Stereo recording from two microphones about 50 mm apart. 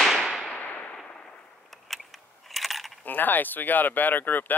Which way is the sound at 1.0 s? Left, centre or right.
Centre.